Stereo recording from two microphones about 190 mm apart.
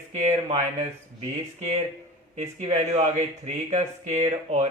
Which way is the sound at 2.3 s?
35° right (ahead or behind).